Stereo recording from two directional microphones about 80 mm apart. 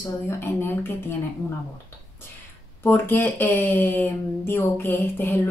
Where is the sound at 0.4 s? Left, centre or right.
Left.